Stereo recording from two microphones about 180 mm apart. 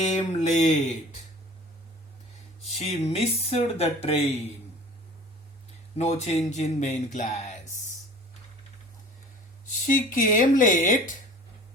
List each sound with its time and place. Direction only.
0.0 s a sound: 40° left (ahead or behind)
2.6 s speech: 35° left (ahead or behind)
6.0 s speech: 35° left (ahead or behind)
9.8 s speech: 50° left (ahead or behind)